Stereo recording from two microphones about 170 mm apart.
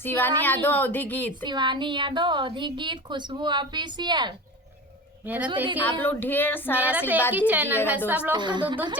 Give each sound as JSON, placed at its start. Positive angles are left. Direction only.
{"t": 0.0, "sound": "speech", "side_deg": 10}
{"t": 1.5, "sound": "a woman's voice", "side_deg": -25}
{"t": 5.2, "sound": "a woman's voice", "side_deg": -10}
{"t": 5.8, "sound": "speech", "side_deg": 10}
{"t": 6.7, "sound": "a woman's voice", "side_deg": -10}
{"t": 8.3, "sound": "a woman's voice", "side_deg": -25}